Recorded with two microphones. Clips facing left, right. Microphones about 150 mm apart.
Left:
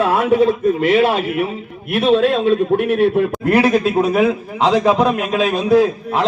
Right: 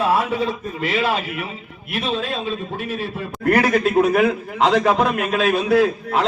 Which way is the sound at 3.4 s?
15° left (ahead or behind).